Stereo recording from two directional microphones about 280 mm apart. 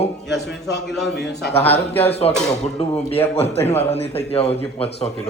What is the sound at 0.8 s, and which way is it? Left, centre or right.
A man's voice, centre.